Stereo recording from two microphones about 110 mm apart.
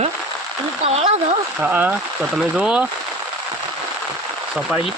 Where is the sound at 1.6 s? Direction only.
15° right (ahead or behind).